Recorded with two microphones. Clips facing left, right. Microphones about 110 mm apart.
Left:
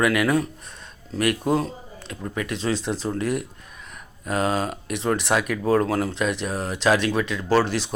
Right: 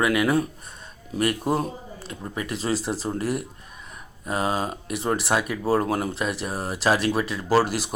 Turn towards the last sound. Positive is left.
turn(degrees=-10)  # may be behind; listen again after turning